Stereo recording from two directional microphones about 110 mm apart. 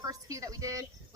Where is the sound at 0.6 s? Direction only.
30° right (ahead or behind).